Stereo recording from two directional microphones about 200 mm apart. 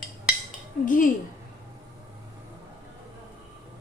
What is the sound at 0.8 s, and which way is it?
Speech, 40° left (ahead or behind).